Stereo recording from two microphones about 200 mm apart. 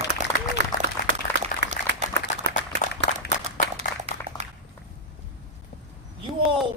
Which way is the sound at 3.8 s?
30° right (ahead or behind).